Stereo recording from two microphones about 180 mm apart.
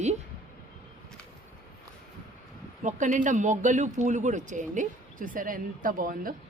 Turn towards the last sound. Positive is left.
turn(degrees=-50)  # may be behind; listen again after turning